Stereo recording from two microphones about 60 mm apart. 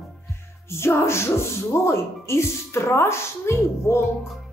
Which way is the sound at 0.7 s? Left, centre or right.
Left.